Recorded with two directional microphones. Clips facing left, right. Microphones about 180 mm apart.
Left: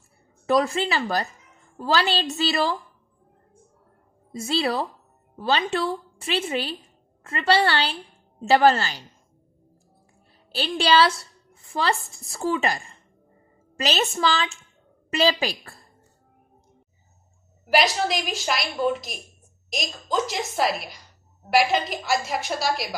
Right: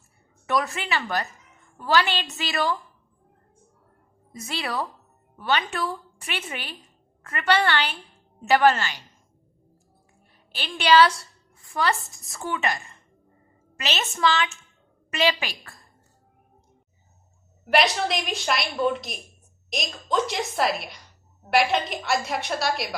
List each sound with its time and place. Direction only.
0.4 s a woman's voice: 30° left (ahead or behind)
4.3 s a woman's voice: 30° left (ahead or behind)
10.5 s a woman's voice: 35° left (ahead or behind)
17.7 s a woman's voice: centre (ahead or behind)